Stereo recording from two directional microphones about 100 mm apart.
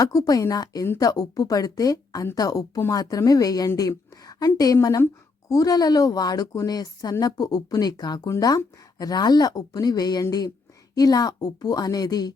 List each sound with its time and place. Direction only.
0.0 s a woman's voice: 40° left (ahead or behind)